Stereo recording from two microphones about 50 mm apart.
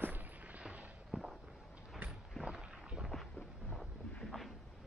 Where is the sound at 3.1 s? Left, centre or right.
Centre.